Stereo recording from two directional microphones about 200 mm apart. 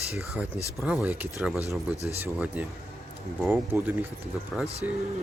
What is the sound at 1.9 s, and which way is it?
Speech, 30° right (ahead or behind).